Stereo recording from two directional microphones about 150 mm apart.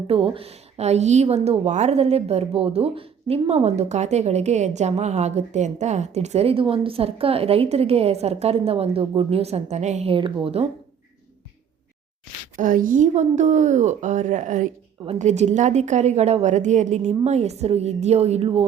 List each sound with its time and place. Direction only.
0.1 s a woman's voice: 40° right (ahead or behind)
12.5 s a woman's voice: 65° right (ahead or behind); by 18.6 s 40° right (ahead or behind)